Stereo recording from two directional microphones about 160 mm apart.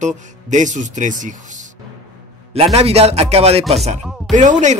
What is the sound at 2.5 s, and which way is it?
Speech, 40° right (ahead or behind).